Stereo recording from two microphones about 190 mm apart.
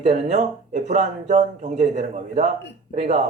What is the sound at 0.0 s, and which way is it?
Speech, 35° right (ahead or behind).